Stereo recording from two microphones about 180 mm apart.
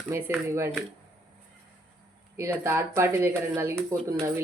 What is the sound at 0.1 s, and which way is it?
Speech, 15° right (ahead or behind).